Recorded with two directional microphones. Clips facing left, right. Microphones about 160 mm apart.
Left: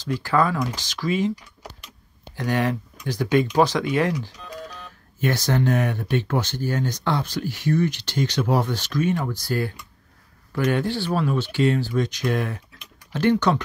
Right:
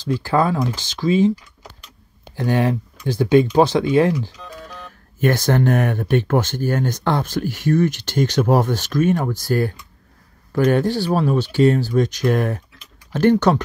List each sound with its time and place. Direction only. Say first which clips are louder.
0.0 s speech: right 3 dB; 30° right (ahead or behind)
2.3 s speech: right 4 dB; 30° right (ahead or behind)
5.2 s speech: right 5 dB; 50° right (ahead or behind)